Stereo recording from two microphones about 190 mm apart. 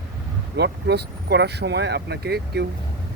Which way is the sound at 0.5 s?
60° right (ahead or behind).